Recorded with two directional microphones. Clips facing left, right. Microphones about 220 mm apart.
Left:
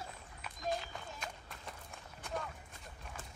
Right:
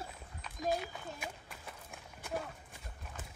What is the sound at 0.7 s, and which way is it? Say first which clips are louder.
Run: right 3 dB; 5° right (ahead or behind).